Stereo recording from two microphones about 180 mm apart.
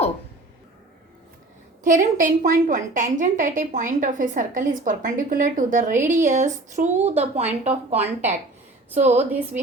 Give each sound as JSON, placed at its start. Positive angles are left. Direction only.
{"t": 1.8, "sound": "a woman's voice", "side_deg": -45}
{"t": 9.1, "sound": "a woman's voice", "side_deg": -10}